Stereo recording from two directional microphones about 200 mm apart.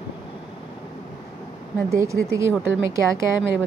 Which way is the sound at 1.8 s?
15° right (ahead or behind).